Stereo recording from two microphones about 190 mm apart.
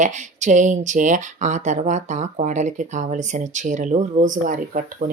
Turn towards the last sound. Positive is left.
turn(degrees=-45)  # may be behind; listen again after turning